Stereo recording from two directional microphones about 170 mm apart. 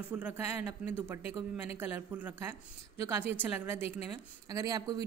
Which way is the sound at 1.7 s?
10° right (ahead or behind).